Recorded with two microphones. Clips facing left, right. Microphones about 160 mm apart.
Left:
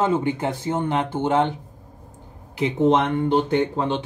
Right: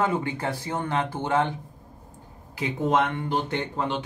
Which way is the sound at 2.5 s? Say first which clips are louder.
Left 5 dB; 20° left (ahead or behind).